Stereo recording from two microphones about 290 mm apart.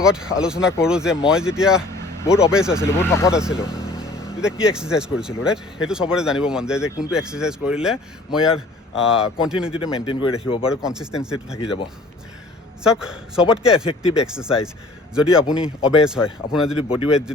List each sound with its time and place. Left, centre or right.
0.0 s speech: centre
2.8 s speech: centre
3.3 s speech: centre
9.7 s speech: centre
10.7 s speech: centre
12.8 s speech: centre